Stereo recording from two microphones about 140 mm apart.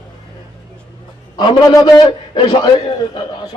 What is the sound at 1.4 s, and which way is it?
Speech, 30° left (ahead or behind).